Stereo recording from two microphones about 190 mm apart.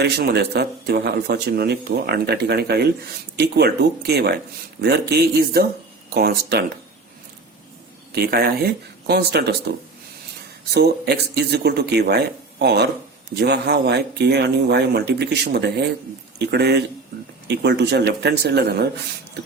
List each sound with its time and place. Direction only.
0.0 s speech: 60° right (ahead or behind)
8.1 s speech: 55° right (ahead or behind)